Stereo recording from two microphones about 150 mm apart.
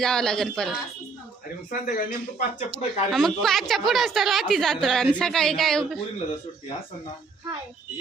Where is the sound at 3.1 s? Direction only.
Centre (ahead or behind).